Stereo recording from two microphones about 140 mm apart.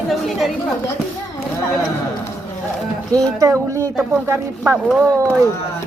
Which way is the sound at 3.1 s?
25° right (ahead or behind).